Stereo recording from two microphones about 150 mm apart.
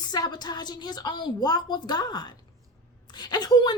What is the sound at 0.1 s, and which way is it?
A woman's voice, 30° left (ahead or behind).